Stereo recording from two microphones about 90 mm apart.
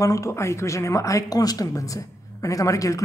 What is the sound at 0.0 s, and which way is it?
Speech, 35° left (ahead or behind).